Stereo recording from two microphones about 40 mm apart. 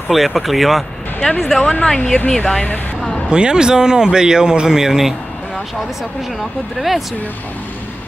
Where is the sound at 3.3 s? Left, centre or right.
Right.